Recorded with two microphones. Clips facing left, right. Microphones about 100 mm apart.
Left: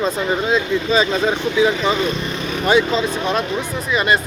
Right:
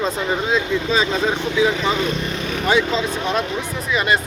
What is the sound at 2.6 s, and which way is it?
Speech, 55° left (ahead or behind).